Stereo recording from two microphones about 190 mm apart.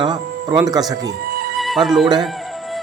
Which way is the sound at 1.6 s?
Centre (ahead or behind).